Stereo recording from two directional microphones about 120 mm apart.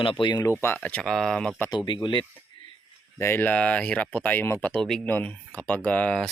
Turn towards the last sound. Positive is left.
turn(degrees=10)  # may be behind; listen again after turning